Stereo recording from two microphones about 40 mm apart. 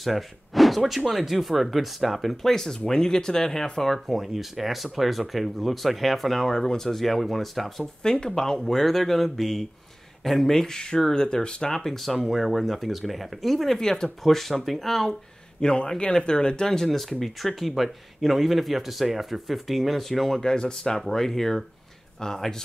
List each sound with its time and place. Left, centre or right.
0.0 s speech: centre
2.5 s speech: centre
8.0 s speech: centre
11.7 s speech: centre
13.7 s speech: centre
14.2 s speech: centre
15.6 s speech: left